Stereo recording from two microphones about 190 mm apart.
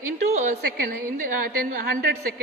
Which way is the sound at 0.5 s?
55° right (ahead or behind).